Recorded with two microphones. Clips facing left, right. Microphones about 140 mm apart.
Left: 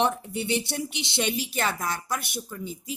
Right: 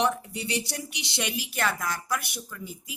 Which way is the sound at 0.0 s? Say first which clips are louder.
Left 1 dB; 25° left (ahead or behind).